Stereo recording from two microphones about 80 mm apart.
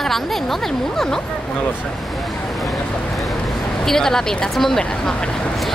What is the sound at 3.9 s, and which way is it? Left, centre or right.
Speech, centre.